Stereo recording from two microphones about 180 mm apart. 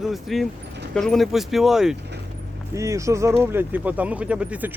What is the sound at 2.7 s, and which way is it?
Speech, 15° right (ahead or behind).